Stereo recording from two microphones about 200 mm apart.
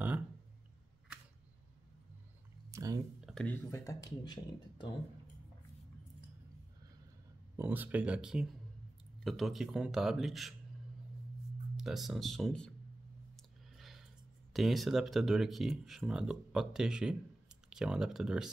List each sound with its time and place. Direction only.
2.7 s a sound: 15° right (ahead or behind)
3.2 s speech: centre (ahead or behind); by 4.8 s 20° left (ahead or behind)
7.5 s speech: 10° right (ahead or behind)
11.7 s speech: centre (ahead or behind)
13.7 s a sound: centre (ahead or behind)
14.5 s speech: centre (ahead or behind)